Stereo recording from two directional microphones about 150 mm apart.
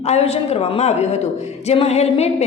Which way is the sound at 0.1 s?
45° left (ahead or behind).